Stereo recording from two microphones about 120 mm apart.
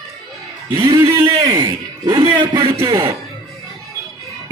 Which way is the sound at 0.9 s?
30° right (ahead or behind).